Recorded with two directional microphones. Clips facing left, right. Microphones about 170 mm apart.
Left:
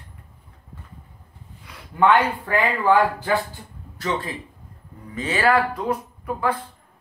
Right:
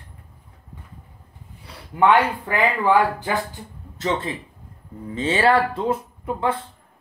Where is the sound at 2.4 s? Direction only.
15° right (ahead or behind).